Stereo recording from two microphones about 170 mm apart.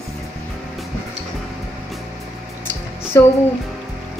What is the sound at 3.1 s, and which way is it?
Speech, 15° left (ahead or behind).